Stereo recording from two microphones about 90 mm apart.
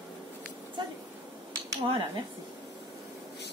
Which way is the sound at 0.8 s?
60° right (ahead or behind).